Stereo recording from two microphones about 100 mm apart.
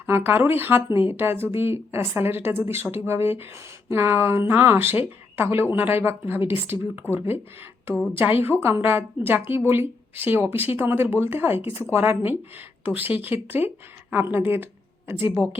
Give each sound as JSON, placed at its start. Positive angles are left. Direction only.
{"t": 0.0, "sound": "a woman's voice", "side_deg": -20}
{"t": 8.1, "sound": "a woman's voice", "side_deg": -20}